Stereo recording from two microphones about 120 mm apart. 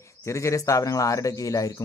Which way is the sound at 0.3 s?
25° left (ahead or behind).